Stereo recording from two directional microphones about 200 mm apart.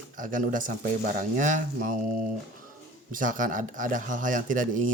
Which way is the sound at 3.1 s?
40° right (ahead or behind).